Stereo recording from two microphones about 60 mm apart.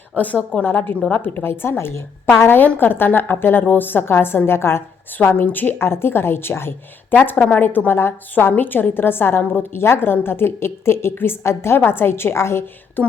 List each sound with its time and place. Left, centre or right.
0.2 s a woman's voice: left